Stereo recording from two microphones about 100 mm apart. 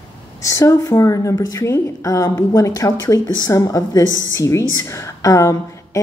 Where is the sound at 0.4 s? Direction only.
35° left (ahead or behind).